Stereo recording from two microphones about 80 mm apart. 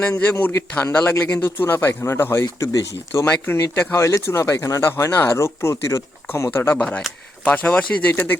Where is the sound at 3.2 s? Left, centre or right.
Left.